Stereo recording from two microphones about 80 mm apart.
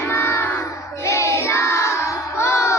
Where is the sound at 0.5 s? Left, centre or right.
Left.